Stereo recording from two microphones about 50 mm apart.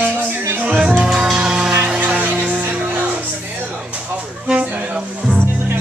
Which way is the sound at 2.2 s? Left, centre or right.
Right.